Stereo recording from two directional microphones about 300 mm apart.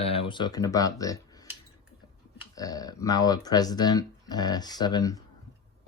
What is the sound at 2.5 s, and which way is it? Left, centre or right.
Speech, centre.